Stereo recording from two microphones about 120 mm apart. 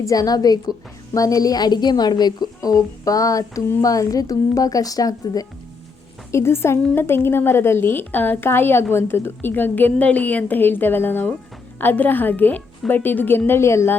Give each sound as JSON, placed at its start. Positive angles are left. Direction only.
{"t": 0.0, "sound": "a woman's voice", "side_deg": 30}